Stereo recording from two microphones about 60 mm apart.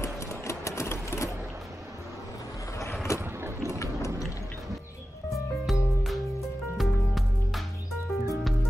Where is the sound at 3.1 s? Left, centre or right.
Left.